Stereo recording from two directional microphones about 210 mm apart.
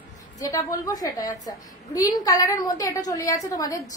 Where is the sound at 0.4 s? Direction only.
15° left (ahead or behind).